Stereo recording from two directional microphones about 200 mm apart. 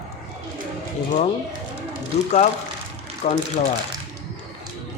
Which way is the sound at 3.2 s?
35° left (ahead or behind).